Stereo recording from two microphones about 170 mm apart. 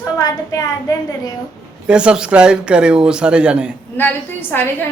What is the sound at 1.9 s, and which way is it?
Speech, 5° right (ahead or behind).